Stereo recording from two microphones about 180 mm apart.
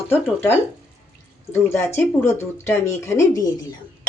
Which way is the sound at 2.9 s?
15° left (ahead or behind).